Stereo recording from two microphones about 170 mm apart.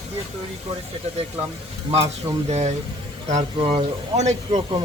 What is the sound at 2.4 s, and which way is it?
Speech, 40° right (ahead or behind).